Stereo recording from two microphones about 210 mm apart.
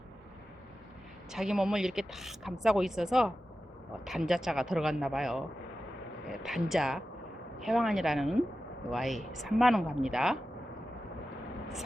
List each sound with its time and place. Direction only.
1.3 s a woman's voice: centre (ahead or behind)
6.4 s a woman's voice: centre (ahead or behind)